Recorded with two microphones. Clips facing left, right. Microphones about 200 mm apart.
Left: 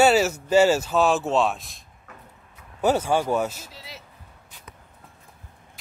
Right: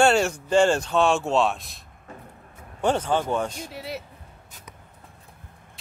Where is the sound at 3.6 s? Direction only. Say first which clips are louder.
Right 10 dB; 60° right (ahead or behind).